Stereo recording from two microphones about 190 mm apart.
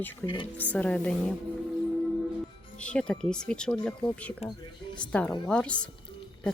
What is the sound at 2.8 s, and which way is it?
Speech, 5° left (ahead or behind).